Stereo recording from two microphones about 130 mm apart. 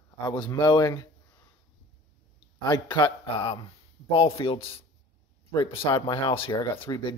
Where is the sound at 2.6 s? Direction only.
30° left (ahead or behind).